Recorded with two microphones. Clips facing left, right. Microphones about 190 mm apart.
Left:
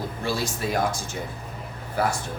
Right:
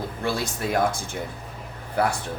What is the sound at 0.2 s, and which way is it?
Speech, 55° right (ahead or behind).